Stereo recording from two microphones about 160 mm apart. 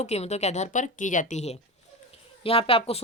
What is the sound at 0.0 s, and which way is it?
A woman's voice, 45° left (ahead or behind).